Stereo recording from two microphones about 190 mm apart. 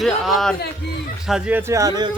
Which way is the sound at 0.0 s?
Centre (ahead or behind).